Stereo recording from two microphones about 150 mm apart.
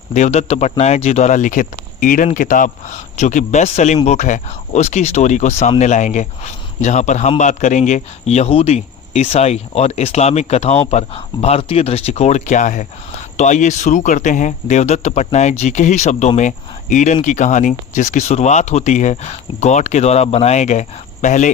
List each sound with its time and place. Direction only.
0.1 s speech: 50° left (ahead or behind)